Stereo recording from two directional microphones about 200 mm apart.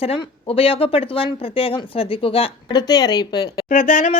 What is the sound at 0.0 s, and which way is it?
Speech, 30° left (ahead or behind).